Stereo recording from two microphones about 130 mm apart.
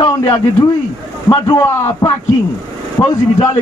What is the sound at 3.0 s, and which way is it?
Speech, 25° left (ahead or behind).